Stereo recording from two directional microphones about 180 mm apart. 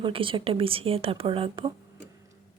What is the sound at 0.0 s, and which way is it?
A woman's voice, 30° right (ahead or behind).